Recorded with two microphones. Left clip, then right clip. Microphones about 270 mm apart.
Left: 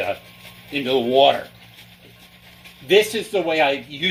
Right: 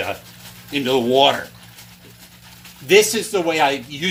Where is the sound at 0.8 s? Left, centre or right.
Right.